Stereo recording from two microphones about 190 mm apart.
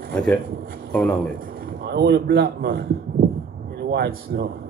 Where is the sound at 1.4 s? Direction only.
50° right (ahead or behind).